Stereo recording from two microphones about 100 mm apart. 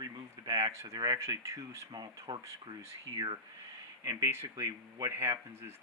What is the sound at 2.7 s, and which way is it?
Speech, 75° right (ahead or behind).